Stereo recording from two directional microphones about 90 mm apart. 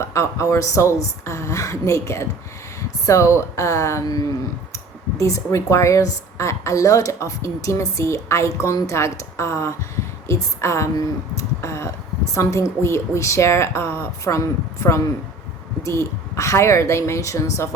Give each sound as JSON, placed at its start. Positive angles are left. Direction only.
{"t": 0.0, "sound": "a woman's voice", "side_deg": 35}